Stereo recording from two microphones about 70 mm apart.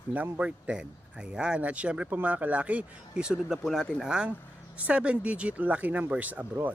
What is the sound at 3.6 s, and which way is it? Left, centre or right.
Speech, centre.